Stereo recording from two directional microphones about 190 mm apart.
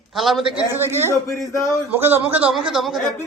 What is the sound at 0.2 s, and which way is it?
Speech, centre (ahead or behind).